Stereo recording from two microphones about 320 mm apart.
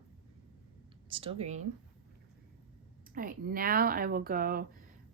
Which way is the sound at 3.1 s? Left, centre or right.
Right.